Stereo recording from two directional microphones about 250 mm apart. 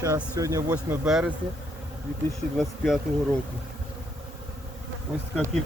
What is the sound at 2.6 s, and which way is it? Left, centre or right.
Speech, centre.